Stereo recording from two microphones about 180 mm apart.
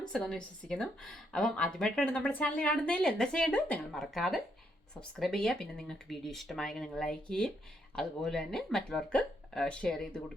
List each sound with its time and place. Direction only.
0.1 s a woman's voice: 5° left (ahead or behind)